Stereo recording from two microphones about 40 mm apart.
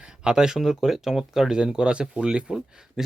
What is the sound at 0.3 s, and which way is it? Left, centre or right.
Speech, centre.